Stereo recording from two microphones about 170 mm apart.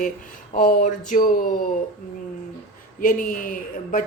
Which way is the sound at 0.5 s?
55° left (ahead or behind).